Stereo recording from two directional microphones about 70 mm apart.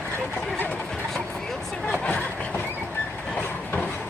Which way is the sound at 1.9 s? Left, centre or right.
Left.